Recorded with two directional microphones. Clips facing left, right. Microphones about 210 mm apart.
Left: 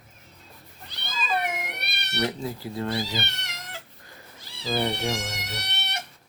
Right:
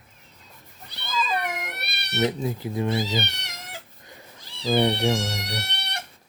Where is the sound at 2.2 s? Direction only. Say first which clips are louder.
Right 4 dB; 20° right (ahead or behind).